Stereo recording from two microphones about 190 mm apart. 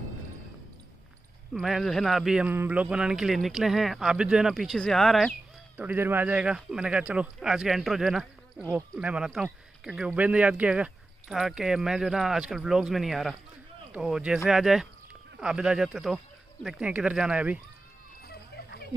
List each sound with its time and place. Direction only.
1.5 s speech: centre (ahead or behind)
5.8 s speech: 10° right (ahead or behind)
18.2 s a sound: 60° left (ahead or behind)